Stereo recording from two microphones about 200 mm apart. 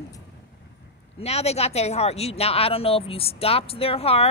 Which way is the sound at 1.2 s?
30° left (ahead or behind).